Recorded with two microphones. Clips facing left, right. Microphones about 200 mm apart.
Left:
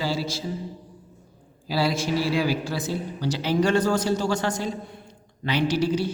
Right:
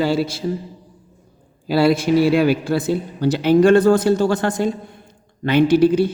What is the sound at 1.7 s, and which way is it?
A man's voice, 60° right (ahead or behind).